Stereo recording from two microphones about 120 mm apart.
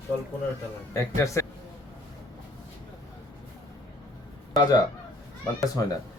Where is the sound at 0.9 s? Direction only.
25° left (ahead or behind).